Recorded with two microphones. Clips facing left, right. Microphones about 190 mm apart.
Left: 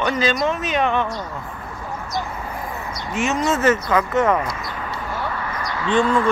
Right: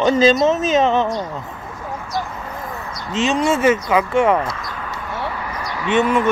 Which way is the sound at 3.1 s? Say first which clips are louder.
Right 3 dB; 15° right (ahead or behind).